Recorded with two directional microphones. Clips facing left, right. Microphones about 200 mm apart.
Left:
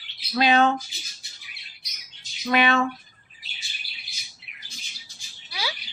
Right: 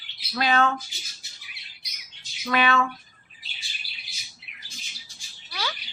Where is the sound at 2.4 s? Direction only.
25° left (ahead or behind).